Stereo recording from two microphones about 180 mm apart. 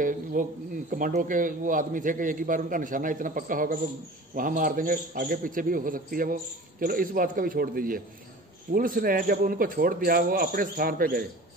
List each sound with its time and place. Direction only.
0.0 s speech: 50° right (ahead or behind)